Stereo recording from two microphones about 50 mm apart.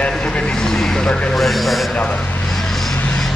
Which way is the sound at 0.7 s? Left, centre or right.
Centre.